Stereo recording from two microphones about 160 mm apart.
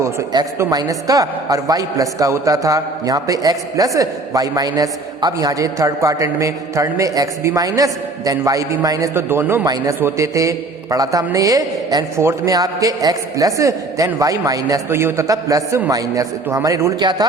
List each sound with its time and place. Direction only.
0.0 s a woman's voice: 20° right (ahead or behind)